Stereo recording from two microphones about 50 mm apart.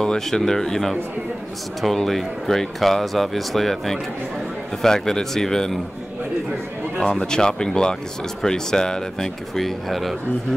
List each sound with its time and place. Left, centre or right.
0.0 s speech: centre
7.0 s speech: centre
9.6 s speech: centre